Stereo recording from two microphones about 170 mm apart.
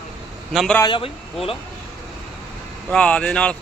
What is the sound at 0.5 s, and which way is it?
Speech, centre (ahead or behind).